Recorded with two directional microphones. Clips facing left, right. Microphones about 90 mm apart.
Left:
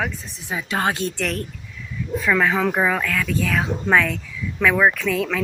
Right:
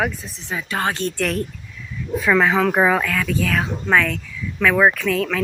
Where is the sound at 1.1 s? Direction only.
Centre (ahead or behind); by 3.1 s 20° right (ahead or behind).